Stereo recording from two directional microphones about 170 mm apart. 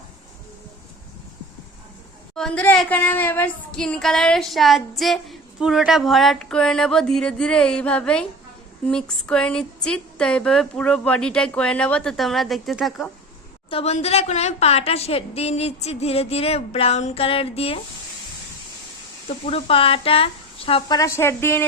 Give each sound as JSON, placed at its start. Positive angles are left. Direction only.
{"t": 2.3, "sound": "a woman's voice", "side_deg": 5}
{"t": 13.7, "sound": "a woman's voice", "side_deg": 35}
{"t": 19.5, "sound": "a woman's voice", "side_deg": 35}